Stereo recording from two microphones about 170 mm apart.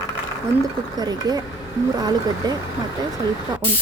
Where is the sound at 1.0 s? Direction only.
25° right (ahead or behind).